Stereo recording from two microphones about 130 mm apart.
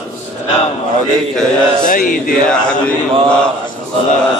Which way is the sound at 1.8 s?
90° left.